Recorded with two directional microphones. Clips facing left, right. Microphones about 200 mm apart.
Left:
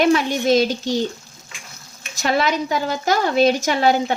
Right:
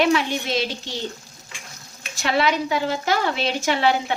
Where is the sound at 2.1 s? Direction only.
45° left (ahead or behind).